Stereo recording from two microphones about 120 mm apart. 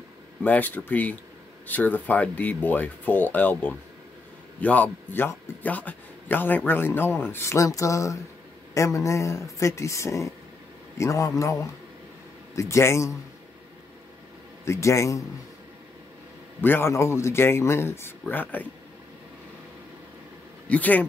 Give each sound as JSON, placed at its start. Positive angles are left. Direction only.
{"t": 0.4, "sound": "a man's voice", "side_deg": 15}
{"t": 14.6, "sound": "speech", "side_deg": 25}
{"t": 16.6, "sound": "a man's voice", "side_deg": 20}
{"t": 20.6, "sound": "speech", "side_deg": 10}